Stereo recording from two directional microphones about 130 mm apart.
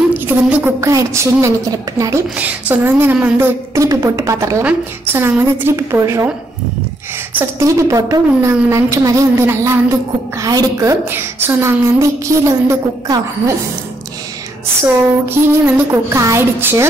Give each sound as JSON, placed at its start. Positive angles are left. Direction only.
{"t": 0.1, "sound": "a woman's voice", "side_deg": -10}
{"t": 2.3, "sound": "a sound", "side_deg": -15}
{"t": 3.7, "sound": "a woman's voice", "side_deg": -25}
{"t": 7.3, "sound": "a woman's voice", "side_deg": -25}
{"t": 15.2, "sound": "a woman's voice", "side_deg": -20}